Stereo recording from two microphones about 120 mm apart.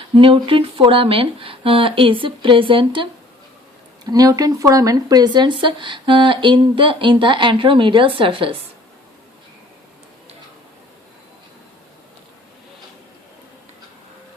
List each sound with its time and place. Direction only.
0.1 s speech: 45° right (ahead or behind)
4.0 s speech: 30° right (ahead or behind); by 8.5 s 45° right (ahead or behind)